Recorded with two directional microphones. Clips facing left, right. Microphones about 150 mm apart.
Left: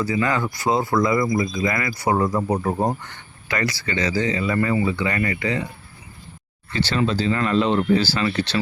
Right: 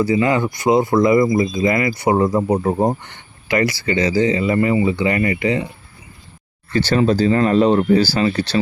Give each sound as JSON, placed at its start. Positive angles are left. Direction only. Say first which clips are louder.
{"t": 0.0, "sound": "speech", "louder": "right 6 dB", "side_deg": -25}
{"t": 6.7, "sound": "speech", "louder": "right 6 dB", "side_deg": -45}